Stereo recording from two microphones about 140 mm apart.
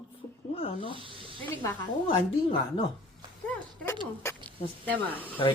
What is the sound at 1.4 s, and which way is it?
Speech, 15° left (ahead or behind).